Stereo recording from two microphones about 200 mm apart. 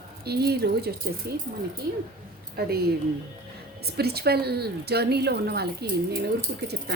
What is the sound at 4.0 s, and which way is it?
A woman's voice, 50° right (ahead or behind).